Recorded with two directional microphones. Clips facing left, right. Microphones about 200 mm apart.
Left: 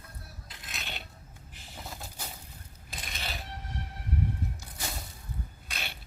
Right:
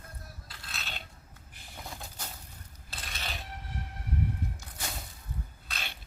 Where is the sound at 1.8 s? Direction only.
5° left (ahead or behind).